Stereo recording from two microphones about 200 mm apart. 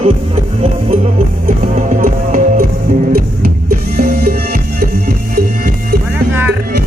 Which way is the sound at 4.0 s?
50° right (ahead or behind).